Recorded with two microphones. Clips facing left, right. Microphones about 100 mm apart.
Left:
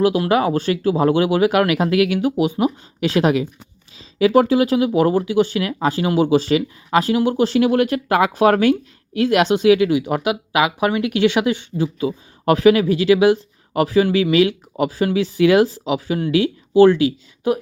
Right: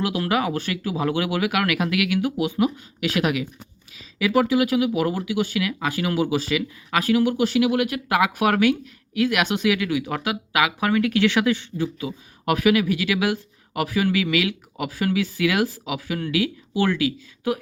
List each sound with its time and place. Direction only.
0.0 s speech: 30° left (ahead or behind)